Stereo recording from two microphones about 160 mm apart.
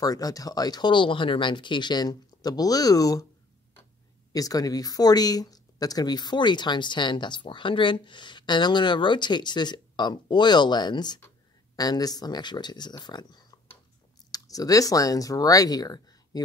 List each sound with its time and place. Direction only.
0.0 s speech: 20° left (ahead or behind)
4.3 s speech: 20° left (ahead or behind)